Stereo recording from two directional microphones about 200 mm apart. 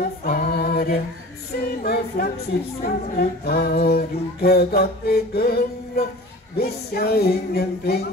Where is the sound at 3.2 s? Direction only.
50° left (ahead or behind).